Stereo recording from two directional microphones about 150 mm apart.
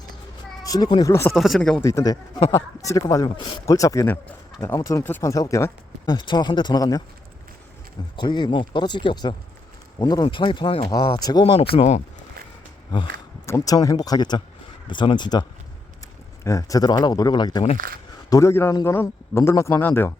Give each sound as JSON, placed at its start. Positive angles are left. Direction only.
{"t": 0.6, "sound": "speech", "side_deg": 25}
{"t": 1.3, "sound": "speech", "side_deg": 0}
{"t": 1.8, "sound": "speech", "side_deg": 20}
{"t": 3.7, "sound": "speech", "side_deg": 20}
{"t": 8.1, "sound": "speech", "side_deg": 30}
{"t": 12.9, "sound": "speech", "side_deg": 30}
{"t": 17.7, "sound": "speech", "side_deg": -75}
{"t": 18.3, "sound": "speech", "side_deg": 20}